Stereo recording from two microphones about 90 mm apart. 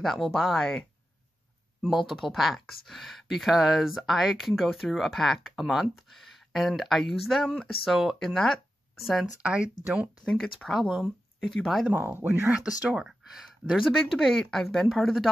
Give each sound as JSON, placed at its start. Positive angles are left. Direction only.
{"t": 0.0, "sound": "speech", "side_deg": 5}
{"t": 9.4, "sound": "speech", "side_deg": -15}
{"t": 10.6, "sound": "speech", "side_deg": 0}
{"t": 11.9, "sound": "speech", "side_deg": -25}
{"t": 12.9, "sound": "speech", "side_deg": -5}